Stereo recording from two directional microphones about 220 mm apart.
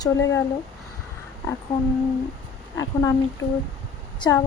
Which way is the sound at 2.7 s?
15° left (ahead or behind).